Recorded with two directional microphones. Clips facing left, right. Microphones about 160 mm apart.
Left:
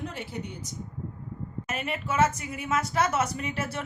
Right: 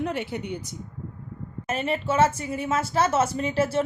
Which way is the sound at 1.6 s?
30° right (ahead or behind).